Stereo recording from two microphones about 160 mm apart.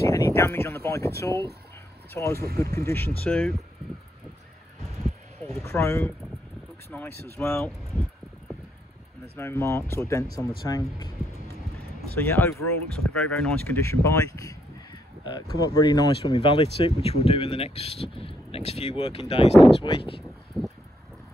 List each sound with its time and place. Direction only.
0.0 s speech: 20° left (ahead or behind)
5.6 s speech: 15° left (ahead or behind)
9.4 s speech: 15° left (ahead or behind)
12.1 s speech: 10° left (ahead or behind)
13.8 s speech: 20° left (ahead or behind); by 20.2 s 35° left (ahead or behind)
20.5 s a sound: centre (ahead or behind)